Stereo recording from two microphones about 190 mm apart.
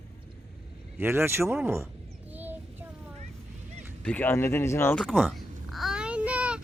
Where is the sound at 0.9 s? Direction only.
10° right (ahead or behind).